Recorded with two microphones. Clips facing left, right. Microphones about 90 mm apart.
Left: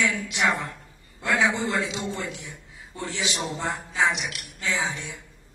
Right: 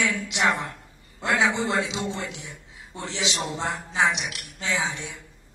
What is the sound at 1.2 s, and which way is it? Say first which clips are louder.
A woman's voice: even; 20° right (ahead or behind).